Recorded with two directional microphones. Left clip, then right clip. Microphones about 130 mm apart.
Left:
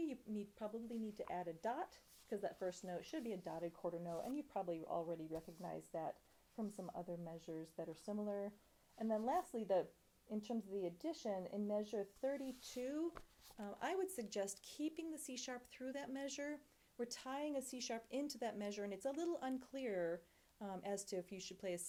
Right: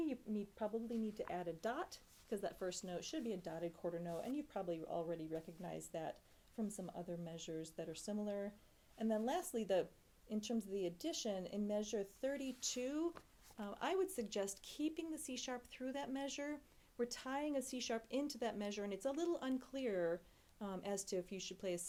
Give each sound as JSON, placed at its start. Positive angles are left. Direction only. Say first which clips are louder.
{"t": 0.0, "sound": "a sound", "louder": "right 3 dB", "side_deg": -20}
{"t": 1.3, "sound": "speech", "louder": "left 1 dB", "side_deg": -35}
{"t": 2.3, "sound": "speech", "louder": "right 1 dB", "side_deg": -10}
{"t": 2.9, "sound": "speech", "louder": "right 2 dB", "side_deg": -30}